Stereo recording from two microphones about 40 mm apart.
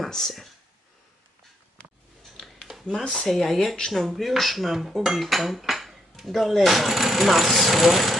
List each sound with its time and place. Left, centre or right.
0.1 s speech: centre
3.0 s speech: left
3.2 s dishes: centre